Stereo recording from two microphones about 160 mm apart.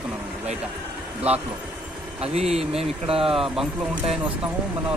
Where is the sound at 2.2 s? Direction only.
40° right (ahead or behind).